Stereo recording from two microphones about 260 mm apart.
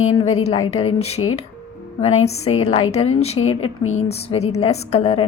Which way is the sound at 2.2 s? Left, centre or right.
Left.